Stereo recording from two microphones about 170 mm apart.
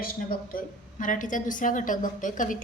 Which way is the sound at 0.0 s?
55° left (ahead or behind).